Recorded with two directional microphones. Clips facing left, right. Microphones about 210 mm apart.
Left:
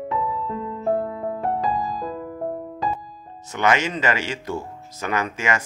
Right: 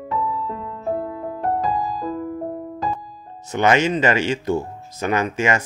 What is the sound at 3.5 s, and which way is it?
Speech, 25° right (ahead or behind).